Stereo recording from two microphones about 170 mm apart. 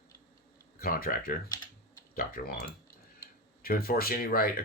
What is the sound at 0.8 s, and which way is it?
Speech, 60° left (ahead or behind).